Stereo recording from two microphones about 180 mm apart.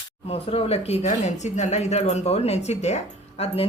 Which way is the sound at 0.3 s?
35° left (ahead or behind).